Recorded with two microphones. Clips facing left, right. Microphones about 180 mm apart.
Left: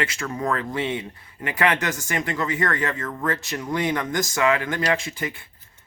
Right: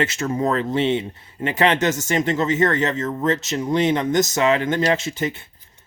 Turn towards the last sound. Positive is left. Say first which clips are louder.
# right 6 dB
turn(degrees=-25)  # may be behind; listen again after turning